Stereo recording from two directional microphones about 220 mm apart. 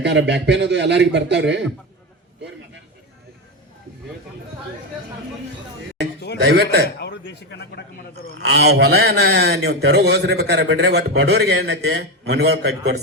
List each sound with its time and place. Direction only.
0.0 s a man's voice: 50° right (ahead or behind)
6.4 s a man's voice: 50° right (ahead or behind)
6.8 s a man's voice: 50° left (ahead or behind)
8.4 s a man's voice: 50° right (ahead or behind)